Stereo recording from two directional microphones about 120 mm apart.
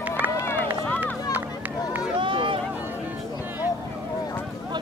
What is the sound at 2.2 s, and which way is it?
Run, 45° right (ahead or behind).